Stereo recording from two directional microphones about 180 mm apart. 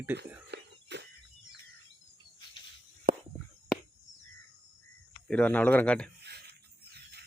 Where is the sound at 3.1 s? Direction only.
50° right (ahead or behind).